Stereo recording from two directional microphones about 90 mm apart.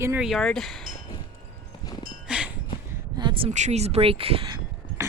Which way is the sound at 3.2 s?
60° right (ahead or behind).